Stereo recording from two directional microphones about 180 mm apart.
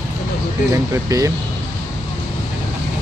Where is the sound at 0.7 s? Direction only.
20° right (ahead or behind).